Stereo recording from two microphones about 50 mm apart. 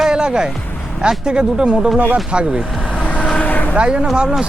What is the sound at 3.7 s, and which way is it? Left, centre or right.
Speech, right.